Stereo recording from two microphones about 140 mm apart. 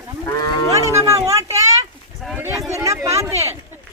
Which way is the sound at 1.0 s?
20° right (ahead or behind).